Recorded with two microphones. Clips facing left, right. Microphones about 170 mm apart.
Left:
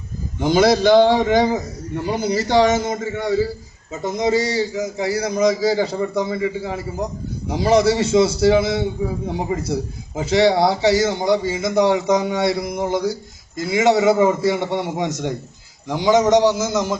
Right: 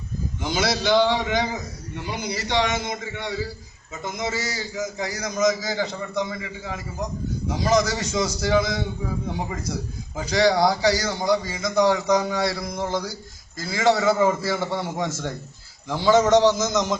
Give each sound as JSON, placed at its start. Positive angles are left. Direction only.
{"t": 0.3, "sound": "a man's voice", "side_deg": 50}